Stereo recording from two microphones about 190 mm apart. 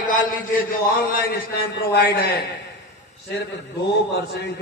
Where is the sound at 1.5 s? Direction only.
60° left (ahead or behind).